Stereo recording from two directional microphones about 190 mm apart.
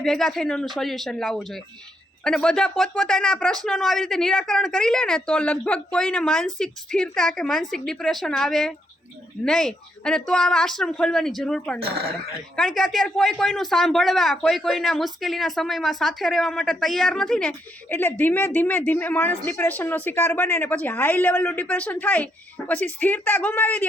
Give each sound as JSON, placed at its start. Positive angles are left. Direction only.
{"t": 0.0, "sound": "speech", "side_deg": 5}
{"t": 11.8, "sound": "speech", "side_deg": -55}
{"t": 12.5, "sound": "speech", "side_deg": 5}